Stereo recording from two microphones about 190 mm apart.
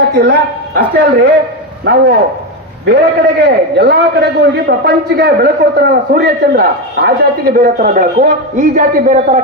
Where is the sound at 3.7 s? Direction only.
60° right (ahead or behind).